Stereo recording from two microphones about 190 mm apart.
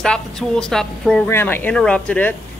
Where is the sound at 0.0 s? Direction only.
5° left (ahead or behind).